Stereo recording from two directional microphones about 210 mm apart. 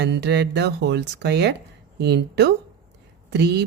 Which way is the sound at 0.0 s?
55° right (ahead or behind).